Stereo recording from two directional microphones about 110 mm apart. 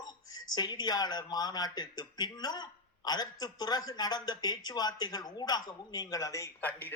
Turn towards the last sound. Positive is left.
turn(degrees=15)  # may be behind; listen again after turning